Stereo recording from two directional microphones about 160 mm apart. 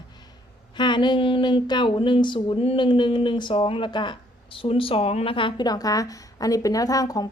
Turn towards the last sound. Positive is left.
turn(degrees=25)  # may be behind; listen again after turning